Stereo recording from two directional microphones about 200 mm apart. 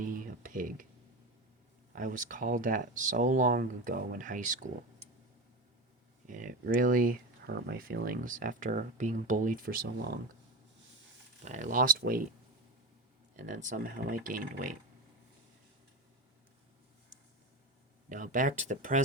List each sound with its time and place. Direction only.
0.0 s speech: 45° right (ahead or behind)
2.0 s speech: 40° right (ahead or behind)
6.2 s speech: 40° right (ahead or behind)
11.4 s speech: 35° right (ahead or behind)
13.3 s speech: 40° right (ahead or behind)
18.1 s speech: 40° right (ahead or behind)